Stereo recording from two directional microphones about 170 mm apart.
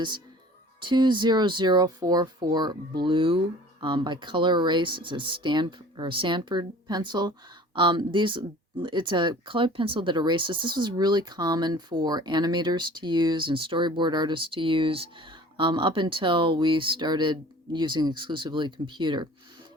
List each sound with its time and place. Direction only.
0.8 s speech: 30° right (ahead or behind)